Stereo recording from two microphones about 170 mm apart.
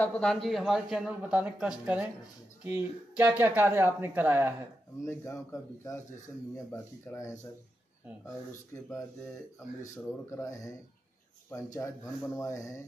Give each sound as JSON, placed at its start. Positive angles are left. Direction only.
{"t": 0.0, "sound": "a man's voice", "side_deg": 5}
{"t": 5.2, "sound": "speech", "side_deg": 15}
{"t": 10.3, "sound": "speech", "side_deg": 20}